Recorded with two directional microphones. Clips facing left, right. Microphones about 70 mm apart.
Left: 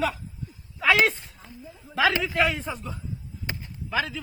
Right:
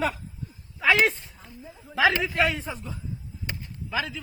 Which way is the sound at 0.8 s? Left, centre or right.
Centre.